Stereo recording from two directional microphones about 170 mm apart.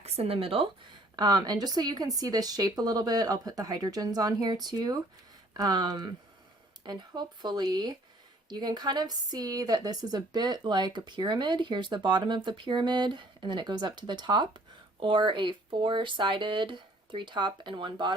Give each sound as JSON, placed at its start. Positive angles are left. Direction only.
{"t": 0.0, "sound": "a woman's voice", "side_deg": -35}